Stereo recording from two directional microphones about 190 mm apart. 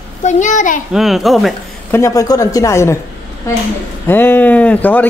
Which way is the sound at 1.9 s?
15° left (ahead or behind).